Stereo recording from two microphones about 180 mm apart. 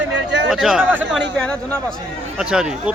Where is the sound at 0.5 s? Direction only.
Centre (ahead or behind).